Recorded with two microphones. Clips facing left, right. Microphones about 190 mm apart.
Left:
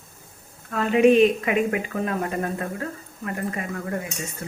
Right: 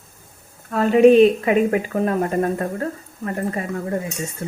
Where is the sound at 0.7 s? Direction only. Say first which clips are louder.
Right 5 dB; 40° right (ahead or behind).